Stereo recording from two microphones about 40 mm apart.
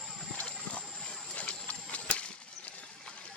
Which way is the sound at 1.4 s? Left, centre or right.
Left.